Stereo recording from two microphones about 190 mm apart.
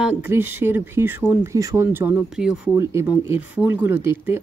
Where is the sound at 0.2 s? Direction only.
10° right (ahead or behind).